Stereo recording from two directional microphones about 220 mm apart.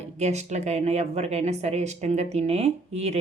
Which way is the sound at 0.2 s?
30° right (ahead or behind).